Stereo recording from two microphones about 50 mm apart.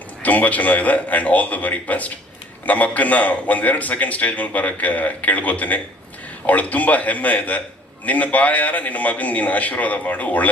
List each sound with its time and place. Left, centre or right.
0.2 s a man's voice: left